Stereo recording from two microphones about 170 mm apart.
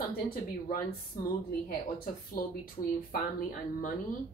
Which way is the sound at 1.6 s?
60° left (ahead or behind).